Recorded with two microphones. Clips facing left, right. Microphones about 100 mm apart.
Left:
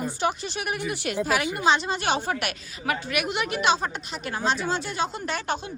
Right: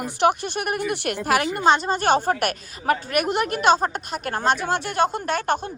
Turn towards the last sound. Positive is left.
turn(degrees=-55)  # may be behind; listen again after turning